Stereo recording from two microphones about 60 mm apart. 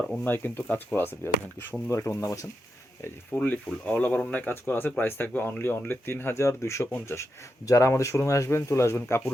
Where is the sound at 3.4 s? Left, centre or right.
Left.